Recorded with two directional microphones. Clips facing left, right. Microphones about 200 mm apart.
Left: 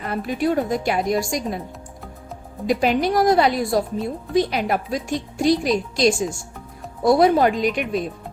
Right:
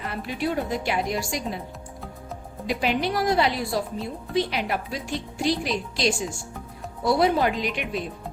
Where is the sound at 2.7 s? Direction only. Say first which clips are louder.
Left 6 dB; 45° left (ahead or behind).